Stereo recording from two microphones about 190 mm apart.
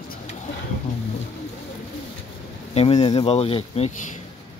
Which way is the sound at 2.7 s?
30° left (ahead or behind).